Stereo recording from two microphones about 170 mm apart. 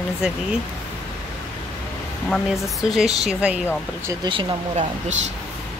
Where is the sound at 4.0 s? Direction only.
30° right (ahead or behind).